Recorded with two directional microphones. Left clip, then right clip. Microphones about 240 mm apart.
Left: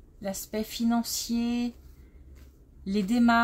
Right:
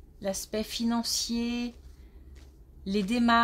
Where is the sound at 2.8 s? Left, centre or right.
Right.